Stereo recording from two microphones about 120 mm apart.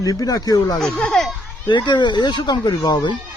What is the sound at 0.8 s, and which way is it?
Speech, 5° left (ahead or behind).